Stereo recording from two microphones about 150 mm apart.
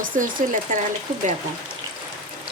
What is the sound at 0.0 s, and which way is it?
Speech, 65° right (ahead or behind).